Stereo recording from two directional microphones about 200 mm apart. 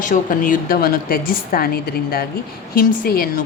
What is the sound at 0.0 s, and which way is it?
A woman's voice, 40° left (ahead or behind).